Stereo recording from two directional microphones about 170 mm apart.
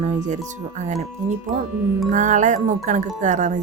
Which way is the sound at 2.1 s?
45° right (ahead or behind).